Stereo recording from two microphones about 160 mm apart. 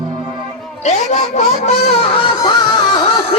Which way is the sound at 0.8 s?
45° left (ahead or behind).